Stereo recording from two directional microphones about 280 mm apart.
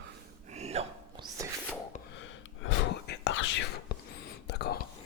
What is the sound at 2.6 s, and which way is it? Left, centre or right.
Whispering, left.